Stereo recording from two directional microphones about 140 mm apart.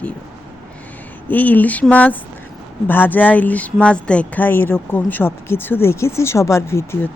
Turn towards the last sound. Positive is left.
turn(degrees=20)  # may be behind; listen again after turning